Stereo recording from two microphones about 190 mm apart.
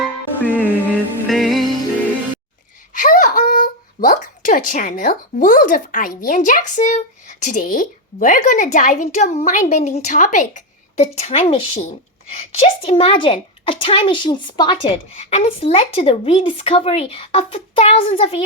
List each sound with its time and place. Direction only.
0.0 s music: 10° left (ahead or behind)
2.9 s speech: 45° left (ahead or behind)